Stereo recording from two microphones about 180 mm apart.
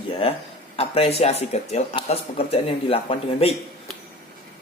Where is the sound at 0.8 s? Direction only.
35° left (ahead or behind).